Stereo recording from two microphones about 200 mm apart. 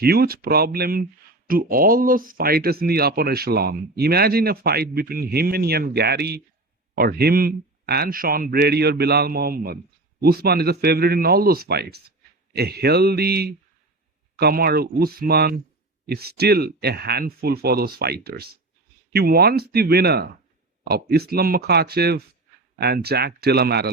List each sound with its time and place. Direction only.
0.0 s speech: 50° right (ahead or behind)